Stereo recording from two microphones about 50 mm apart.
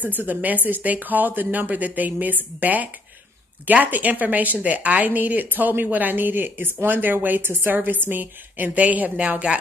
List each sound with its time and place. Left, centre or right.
0.0 s a woman's voice: right